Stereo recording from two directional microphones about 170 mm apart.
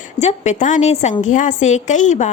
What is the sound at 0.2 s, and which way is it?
A woman's voice, 40° left (ahead or behind).